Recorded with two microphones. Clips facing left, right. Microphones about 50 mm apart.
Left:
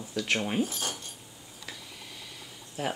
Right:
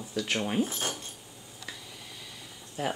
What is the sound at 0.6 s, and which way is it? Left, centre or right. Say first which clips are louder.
Speech: right 1 dB; right.